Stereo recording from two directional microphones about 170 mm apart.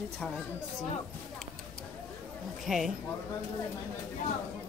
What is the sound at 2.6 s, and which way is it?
Speech, centre (ahead or behind).